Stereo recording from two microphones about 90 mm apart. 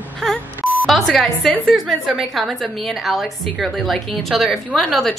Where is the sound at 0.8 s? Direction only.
5° left (ahead or behind).